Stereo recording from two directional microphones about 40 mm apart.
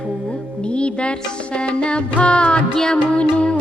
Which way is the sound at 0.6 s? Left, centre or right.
Left.